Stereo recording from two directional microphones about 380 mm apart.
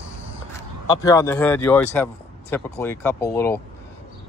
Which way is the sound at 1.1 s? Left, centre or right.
Centre.